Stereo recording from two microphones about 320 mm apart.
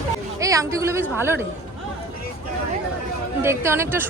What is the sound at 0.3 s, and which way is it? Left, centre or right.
Speech, centre.